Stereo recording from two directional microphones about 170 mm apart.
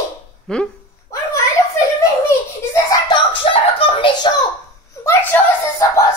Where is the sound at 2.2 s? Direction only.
20° left (ahead or behind).